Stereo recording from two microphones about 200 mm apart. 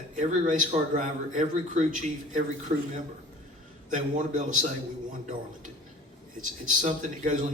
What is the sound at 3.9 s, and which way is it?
Speech, 40° right (ahead or behind).